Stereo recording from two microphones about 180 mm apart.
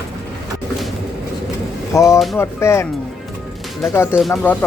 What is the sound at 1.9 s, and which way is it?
Speech, 15° left (ahead or behind).